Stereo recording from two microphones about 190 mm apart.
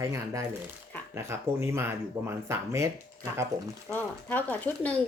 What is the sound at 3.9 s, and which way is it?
A child's voice, 10° left (ahead or behind).